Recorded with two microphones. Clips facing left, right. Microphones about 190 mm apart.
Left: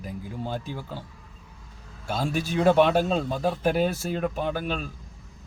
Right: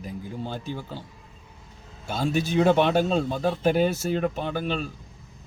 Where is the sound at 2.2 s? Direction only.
10° left (ahead or behind).